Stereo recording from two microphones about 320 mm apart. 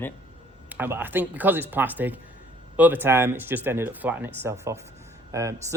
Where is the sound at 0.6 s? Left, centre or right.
Centre.